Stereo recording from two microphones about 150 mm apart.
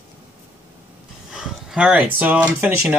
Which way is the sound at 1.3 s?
5° right (ahead or behind).